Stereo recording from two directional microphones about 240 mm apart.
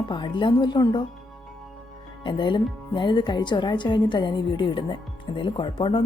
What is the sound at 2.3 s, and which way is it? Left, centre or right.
Speech, centre.